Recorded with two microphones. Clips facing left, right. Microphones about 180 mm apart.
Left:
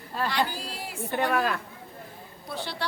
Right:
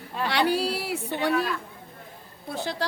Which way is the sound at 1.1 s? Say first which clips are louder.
Even; 65° left (ahead or behind).